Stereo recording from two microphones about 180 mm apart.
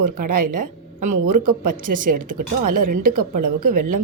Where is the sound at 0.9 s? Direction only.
45° right (ahead or behind).